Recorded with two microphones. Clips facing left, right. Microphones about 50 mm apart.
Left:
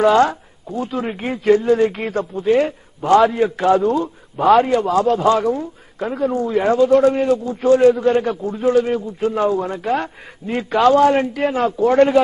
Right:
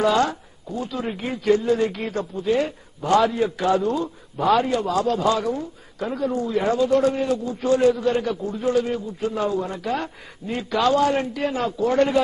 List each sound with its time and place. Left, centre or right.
0.0 s speech: left